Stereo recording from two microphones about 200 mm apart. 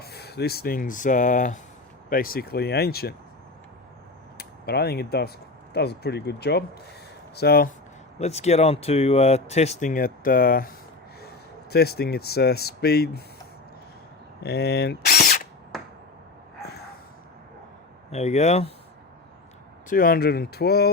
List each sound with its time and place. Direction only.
0.0 s speech: 55° left (ahead or behind)
4.4 s speech: 50° left (ahead or behind)
8.2 s speech: 35° left (ahead or behind); by 13.2 s 55° left (ahead or behind)
14.4 s speech: 50° left (ahead or behind)
15.7 s a sound: centre (ahead or behind)
18.1 s speech: 35° left (ahead or behind)
19.9 s speech: 45° left (ahead or behind)